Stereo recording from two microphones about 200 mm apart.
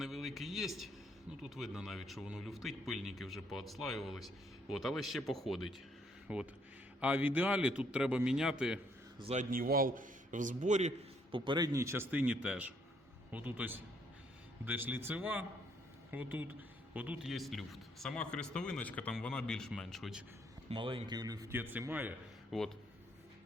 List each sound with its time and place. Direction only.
0.0 s a sound: centre (ahead or behind)
1.3 s a man's voice: centre (ahead or behind)
9.2 s a man's voice: 35° right (ahead or behind); by 20.2 s centre (ahead or behind)
20.7 s a man's voice: 25° right (ahead or behind); by 22.7 s centre (ahead or behind)